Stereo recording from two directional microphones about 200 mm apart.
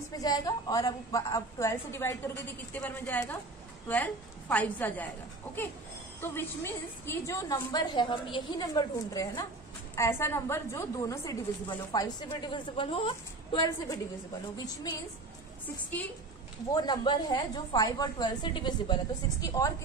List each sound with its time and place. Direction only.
0.2 s a woman's voice: 20° left (ahead or behind)
6.2 s a woman's voice: 10° left (ahead or behind)
16.7 s a woman's voice: 20° left (ahead or behind)